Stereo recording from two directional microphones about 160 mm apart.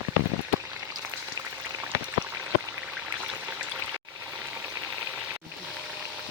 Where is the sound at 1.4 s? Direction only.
25° right (ahead or behind).